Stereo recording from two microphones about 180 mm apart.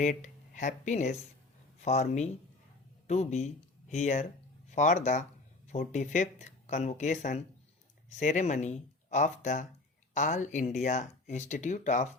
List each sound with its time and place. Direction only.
0.0 s speech: 45° left (ahead or behind)